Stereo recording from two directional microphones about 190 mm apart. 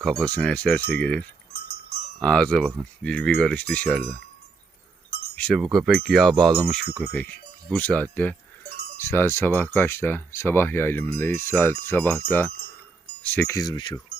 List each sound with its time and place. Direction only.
0.0 s speech: centre (ahead or behind)
1.5 s sheep: 60° left (ahead or behind)
2.2 s speech: 5° left (ahead or behind)
5.3 s speech: 5° left (ahead or behind)
8.7 s cowbell: 60° left (ahead or behind)
9.0 s speech: 10° left (ahead or behind)
13.2 s speech: 10° left (ahead or behind)